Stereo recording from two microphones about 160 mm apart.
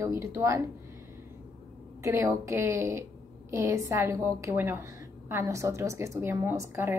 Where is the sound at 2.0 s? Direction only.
20° right (ahead or behind).